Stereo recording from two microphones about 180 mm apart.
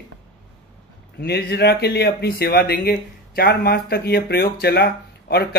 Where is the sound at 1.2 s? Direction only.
65° left (ahead or behind).